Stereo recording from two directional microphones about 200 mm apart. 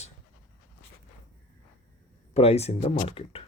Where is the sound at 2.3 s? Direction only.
30° left (ahead or behind).